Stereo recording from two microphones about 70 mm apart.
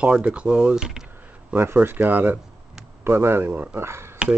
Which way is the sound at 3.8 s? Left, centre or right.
Right.